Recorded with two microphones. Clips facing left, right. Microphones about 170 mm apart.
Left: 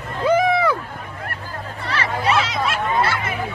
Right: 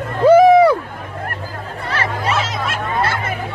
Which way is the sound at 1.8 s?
45° right (ahead or behind).